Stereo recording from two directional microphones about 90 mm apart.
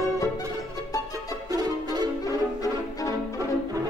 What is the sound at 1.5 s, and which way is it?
Music, 45° right (ahead or behind).